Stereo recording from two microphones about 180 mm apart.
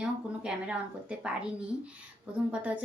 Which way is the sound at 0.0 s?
5° right (ahead or behind).